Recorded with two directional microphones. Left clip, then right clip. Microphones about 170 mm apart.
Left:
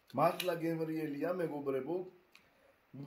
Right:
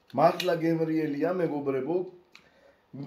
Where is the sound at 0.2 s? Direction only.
5° left (ahead or behind).